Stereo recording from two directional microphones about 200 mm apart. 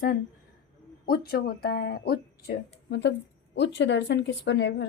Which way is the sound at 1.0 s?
50° left (ahead or behind).